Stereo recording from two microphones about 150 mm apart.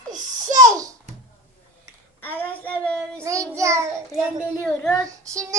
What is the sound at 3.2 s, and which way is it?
Child singing, 20° right (ahead or behind).